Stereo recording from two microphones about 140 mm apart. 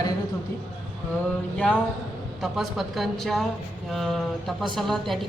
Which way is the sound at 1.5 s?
10° left (ahead or behind).